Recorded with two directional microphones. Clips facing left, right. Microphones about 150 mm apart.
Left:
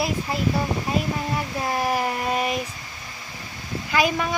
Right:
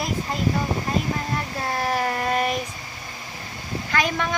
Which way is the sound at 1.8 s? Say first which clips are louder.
Right 1 dB; 10° left (ahead or behind).